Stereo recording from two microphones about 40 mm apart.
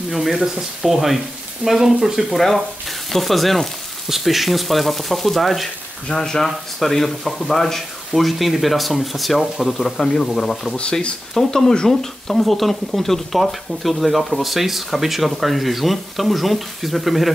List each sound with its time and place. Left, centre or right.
0.1 s speech: centre
2.3 s speech: centre
6.1 s speech: centre
10.8 s speech: left
11.3 s speech: centre